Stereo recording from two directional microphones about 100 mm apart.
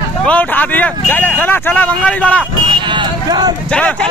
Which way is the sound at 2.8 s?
55° right (ahead or behind).